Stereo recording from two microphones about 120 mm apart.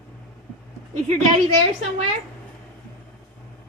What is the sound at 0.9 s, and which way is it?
Speech, 70° right (ahead or behind).